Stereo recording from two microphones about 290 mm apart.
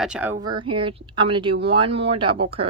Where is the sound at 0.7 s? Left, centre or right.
Centre.